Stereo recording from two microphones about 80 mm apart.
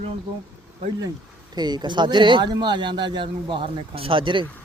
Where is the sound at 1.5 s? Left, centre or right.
Right.